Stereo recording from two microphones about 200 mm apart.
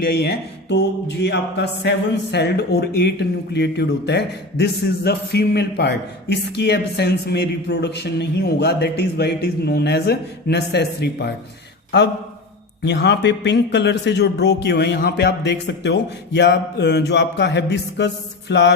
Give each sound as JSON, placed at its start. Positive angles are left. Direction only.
{"t": 0.0, "sound": "speech", "side_deg": 55}
{"t": 12.8, "sound": "speech", "side_deg": 60}